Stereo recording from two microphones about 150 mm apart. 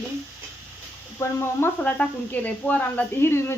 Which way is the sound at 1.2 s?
15° left (ahead or behind).